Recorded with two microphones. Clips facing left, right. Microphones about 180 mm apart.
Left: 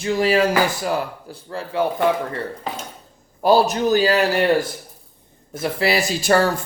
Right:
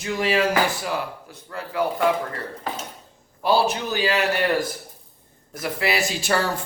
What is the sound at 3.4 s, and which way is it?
Speech, 40° left (ahead or behind).